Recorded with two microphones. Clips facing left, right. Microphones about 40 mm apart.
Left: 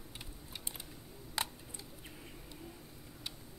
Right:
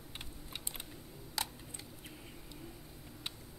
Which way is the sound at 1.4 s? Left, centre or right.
Left.